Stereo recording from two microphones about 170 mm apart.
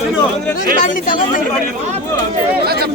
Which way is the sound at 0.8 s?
50° left (ahead or behind).